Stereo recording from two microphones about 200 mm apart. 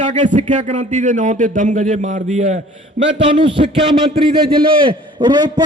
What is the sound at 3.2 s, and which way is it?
Speech, 25° right (ahead or behind).